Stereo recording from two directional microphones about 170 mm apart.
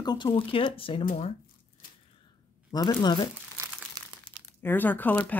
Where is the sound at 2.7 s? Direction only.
20° left (ahead or behind).